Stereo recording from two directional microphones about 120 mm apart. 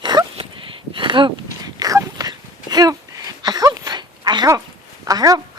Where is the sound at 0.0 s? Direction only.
35° right (ahead or behind).